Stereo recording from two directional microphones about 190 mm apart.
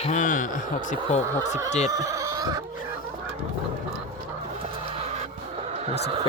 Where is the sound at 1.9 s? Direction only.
15° right (ahead or behind).